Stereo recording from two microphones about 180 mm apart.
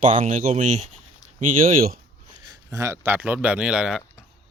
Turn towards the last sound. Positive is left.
turn(degrees=-5)  # may be behind; listen again after turning